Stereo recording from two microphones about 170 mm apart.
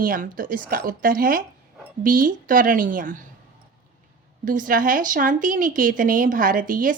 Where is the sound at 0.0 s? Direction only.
55° right (ahead or behind).